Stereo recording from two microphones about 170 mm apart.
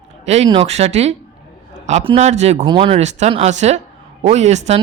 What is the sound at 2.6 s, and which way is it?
Speech, 30° right (ahead or behind).